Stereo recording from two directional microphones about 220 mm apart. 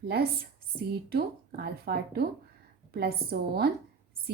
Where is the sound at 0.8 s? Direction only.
45° right (ahead or behind).